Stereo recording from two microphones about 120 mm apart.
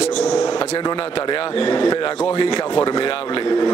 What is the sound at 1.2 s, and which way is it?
Speech, 45° left (ahead or behind).